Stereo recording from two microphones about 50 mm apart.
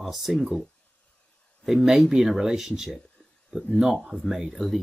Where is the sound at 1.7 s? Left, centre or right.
Centre.